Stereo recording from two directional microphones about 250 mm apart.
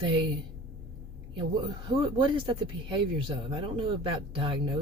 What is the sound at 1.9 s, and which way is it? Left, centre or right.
A woman's voice, right.